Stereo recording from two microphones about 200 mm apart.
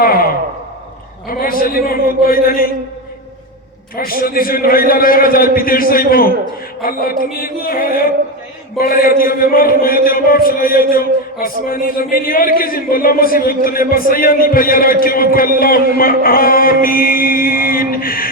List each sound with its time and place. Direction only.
0.0 s speech: 45° left (ahead or behind)
1.3 s speech: 45° left (ahead or behind)
3.9 s speech: 45° left (ahead or behind)